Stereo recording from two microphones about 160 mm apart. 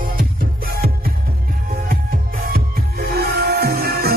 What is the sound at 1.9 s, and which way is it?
Music, 65° right (ahead or behind).